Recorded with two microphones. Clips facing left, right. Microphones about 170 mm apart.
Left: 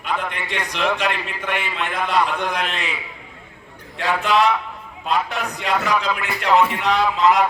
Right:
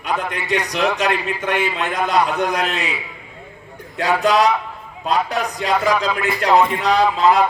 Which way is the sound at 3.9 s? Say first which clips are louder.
Right 3 dB; 40° right (ahead or behind).